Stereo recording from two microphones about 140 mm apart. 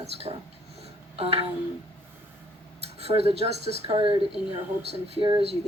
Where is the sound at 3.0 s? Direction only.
45° right (ahead or behind).